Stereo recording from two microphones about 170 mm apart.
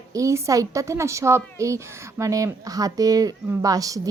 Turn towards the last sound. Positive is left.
turn(degrees=-20)  # may be behind; listen again after turning